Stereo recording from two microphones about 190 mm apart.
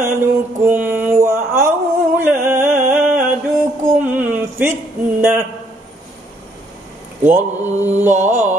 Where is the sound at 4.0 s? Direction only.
10° right (ahead or behind).